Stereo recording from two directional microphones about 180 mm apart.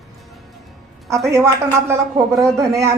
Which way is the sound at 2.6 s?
15° right (ahead or behind).